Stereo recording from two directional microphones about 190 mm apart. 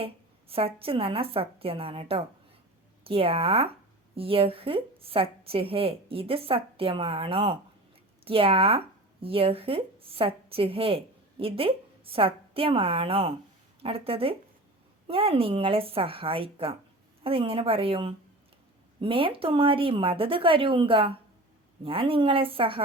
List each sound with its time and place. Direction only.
0.0 s speech: 30° right (ahead or behind)